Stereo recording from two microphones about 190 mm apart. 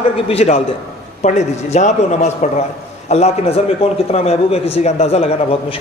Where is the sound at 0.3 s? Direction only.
35° left (ahead or behind).